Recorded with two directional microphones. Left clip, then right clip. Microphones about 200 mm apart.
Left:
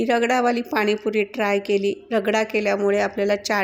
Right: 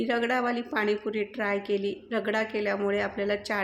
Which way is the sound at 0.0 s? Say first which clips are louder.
Left 8 dB; 35° left (ahead or behind).